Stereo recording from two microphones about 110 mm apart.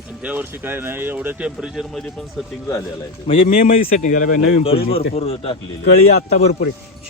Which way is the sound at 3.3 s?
55° left (ahead or behind).